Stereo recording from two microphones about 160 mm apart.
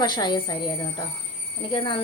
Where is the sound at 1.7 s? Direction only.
30° left (ahead or behind).